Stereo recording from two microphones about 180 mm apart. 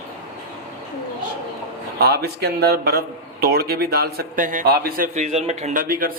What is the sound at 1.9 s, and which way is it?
A man's voice, 60° right (ahead or behind).